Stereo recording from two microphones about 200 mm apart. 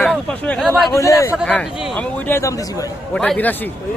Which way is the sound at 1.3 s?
Centre (ahead or behind).